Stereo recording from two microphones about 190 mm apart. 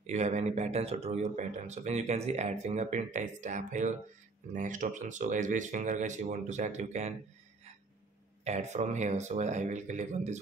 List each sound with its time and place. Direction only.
0.0 s speech: 40° right (ahead or behind)
8.5 s speech: 35° right (ahead or behind)